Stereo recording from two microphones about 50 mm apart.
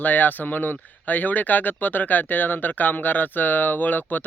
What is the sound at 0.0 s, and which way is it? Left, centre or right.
Speech, left.